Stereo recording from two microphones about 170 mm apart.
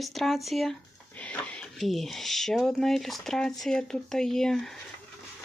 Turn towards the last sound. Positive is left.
turn(degrees=5)  # may be behind; listen again after turning